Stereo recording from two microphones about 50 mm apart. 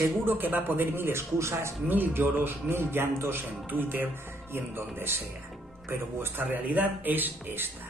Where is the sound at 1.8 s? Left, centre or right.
Right.